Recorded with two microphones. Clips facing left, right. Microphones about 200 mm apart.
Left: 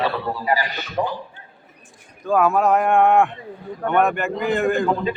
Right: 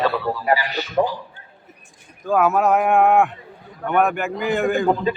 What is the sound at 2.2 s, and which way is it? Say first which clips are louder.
Speech: even; centre (ahead or behind).